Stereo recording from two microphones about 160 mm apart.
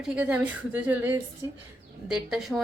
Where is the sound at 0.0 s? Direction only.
5° right (ahead or behind).